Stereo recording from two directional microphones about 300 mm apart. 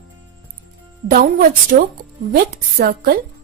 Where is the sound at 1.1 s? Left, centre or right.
Right.